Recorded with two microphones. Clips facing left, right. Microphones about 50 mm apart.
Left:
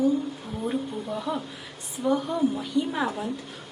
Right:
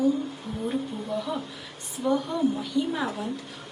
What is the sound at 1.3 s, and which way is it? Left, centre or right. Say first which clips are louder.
A woman's voice: left 1 dB; centre.